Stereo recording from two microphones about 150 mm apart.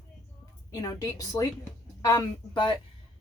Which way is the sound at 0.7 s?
25° left (ahead or behind).